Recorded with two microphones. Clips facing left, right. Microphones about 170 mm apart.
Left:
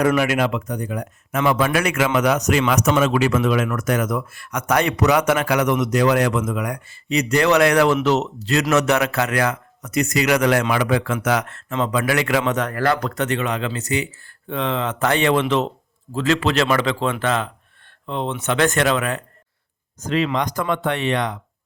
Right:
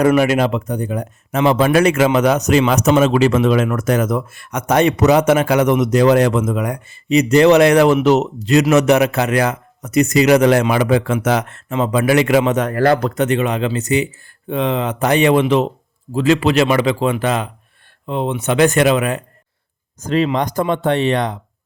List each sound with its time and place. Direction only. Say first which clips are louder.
0.0 s a man's voice: right 5 dB; 25° right (ahead or behind)
20.1 s a man's voice: right 4 dB; 30° right (ahead or behind)